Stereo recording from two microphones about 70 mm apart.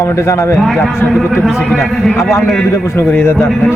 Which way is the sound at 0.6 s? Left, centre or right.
Centre.